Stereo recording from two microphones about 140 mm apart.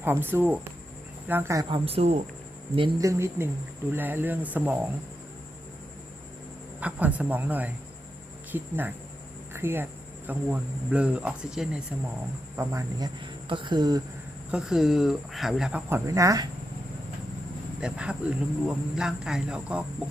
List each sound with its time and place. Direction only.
0.0 s a man's voice: 15° right (ahead or behind)
1.7 s speech: 45° right (ahead or behind)
3.0 s a man's voice: 20° right (ahead or behind)
6.7 s a man's voice: 10° right (ahead or behind)
12.5 s speech: 25° right (ahead or behind)
14.5 s speech: 5° right (ahead or behind)
15.9 s speech: 25° right (ahead or behind)
17.7 s a man's voice: 5° right (ahead or behind)